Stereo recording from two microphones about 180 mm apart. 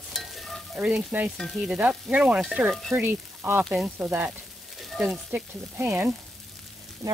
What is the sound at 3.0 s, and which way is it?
Speech, 10° right (ahead or behind).